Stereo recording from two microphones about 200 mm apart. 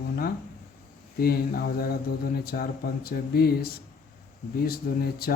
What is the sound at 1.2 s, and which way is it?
Speech, 50° left (ahead or behind).